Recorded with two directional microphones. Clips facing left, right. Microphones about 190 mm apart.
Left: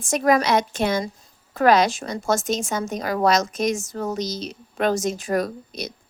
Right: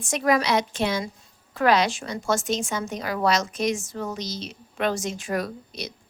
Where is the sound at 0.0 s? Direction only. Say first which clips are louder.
Left 3 dB; 45° left (ahead or behind).